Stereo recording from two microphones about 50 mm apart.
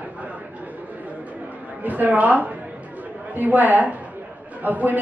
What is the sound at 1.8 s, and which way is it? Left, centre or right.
A woman's voice, right.